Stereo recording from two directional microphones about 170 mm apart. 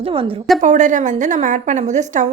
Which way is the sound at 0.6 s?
45° right (ahead or behind).